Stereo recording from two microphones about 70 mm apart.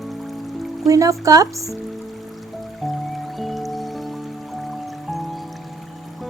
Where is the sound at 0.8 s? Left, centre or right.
Right.